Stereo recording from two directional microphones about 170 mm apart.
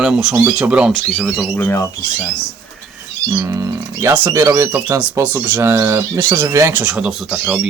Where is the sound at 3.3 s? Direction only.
20° right (ahead or behind).